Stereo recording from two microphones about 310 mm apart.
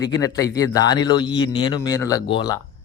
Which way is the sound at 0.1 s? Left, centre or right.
Centre.